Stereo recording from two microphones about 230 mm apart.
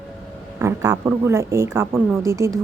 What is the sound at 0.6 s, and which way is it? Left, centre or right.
A woman's voice, centre.